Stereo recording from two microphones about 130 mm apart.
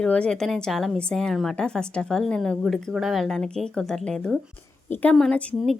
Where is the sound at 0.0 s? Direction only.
5° left (ahead or behind).